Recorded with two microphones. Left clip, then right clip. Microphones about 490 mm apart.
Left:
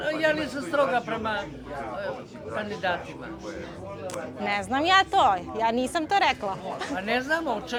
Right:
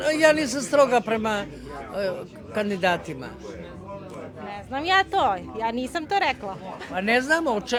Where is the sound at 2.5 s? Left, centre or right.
Right.